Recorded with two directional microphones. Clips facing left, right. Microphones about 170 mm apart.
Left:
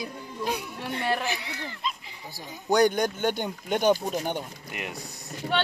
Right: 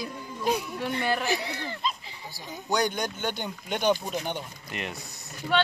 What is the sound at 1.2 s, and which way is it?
Speech, 35° right (ahead or behind).